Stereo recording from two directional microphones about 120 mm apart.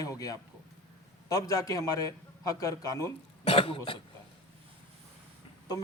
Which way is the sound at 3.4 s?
55° left (ahead or behind).